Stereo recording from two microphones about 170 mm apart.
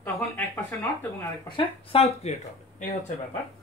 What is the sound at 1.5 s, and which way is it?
Speech, 35° left (ahead or behind).